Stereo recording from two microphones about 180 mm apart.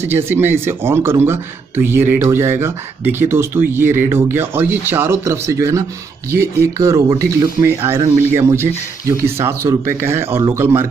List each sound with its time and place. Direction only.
0.0 s speech: 10° right (ahead or behind)